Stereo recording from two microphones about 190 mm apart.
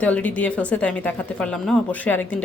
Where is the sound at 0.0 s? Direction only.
10° left (ahead or behind).